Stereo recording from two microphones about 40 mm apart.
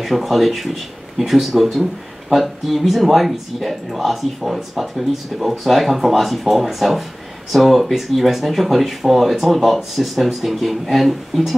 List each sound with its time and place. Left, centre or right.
0.0 s speech: centre